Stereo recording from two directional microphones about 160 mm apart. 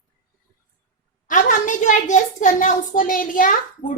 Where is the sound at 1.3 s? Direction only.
55° left (ahead or behind).